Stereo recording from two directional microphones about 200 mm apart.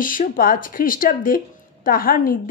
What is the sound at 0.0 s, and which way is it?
Speech, 45° left (ahead or behind).